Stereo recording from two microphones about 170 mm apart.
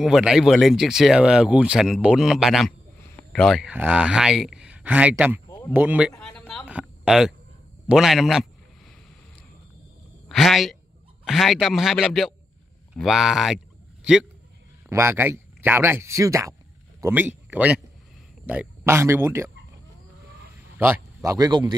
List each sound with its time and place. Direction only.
0.0 s speech: 5° right (ahead or behind)
6.1 s a sound: 5° left (ahead or behind)
6.7 s a sound: 5° right (ahead or behind)
7.9 s speech: centre (ahead or behind)
10.2 s speech: centre (ahead or behind)
14.9 s speech: 15° right (ahead or behind)
20.7 s speech: 10° right (ahead or behind); by 21.7 s 25° right (ahead or behind)